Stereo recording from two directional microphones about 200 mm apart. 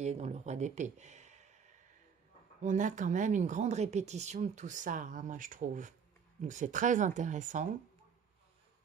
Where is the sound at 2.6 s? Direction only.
40° right (ahead or behind).